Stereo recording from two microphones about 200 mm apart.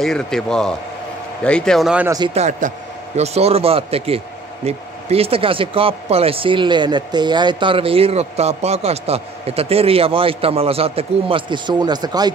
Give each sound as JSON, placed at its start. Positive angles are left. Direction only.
{"t": 0.0, "sound": "speech", "side_deg": 5}
{"t": 2.0, "sound": "speech", "side_deg": -20}
{"t": 2.3, "sound": "speech", "side_deg": -35}